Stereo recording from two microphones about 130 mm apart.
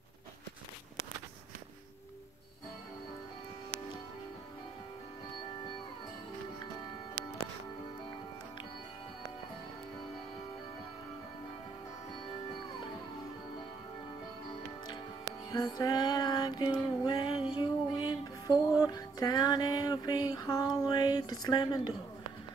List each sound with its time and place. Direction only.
15.5 s music: 30° left (ahead or behind)